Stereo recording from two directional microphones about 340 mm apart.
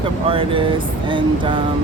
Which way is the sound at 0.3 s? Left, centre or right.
Centre.